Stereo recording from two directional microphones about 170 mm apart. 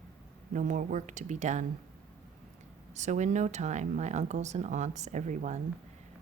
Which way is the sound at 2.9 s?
45° right (ahead or behind).